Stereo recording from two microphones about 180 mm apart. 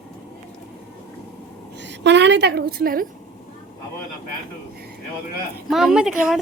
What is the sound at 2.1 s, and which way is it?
A woman's voice, 75° right (ahead or behind).